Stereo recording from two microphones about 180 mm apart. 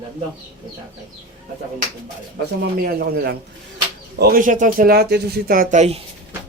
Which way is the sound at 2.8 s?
55° right (ahead or behind).